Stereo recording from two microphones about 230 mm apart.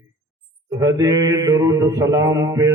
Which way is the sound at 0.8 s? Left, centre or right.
Centre.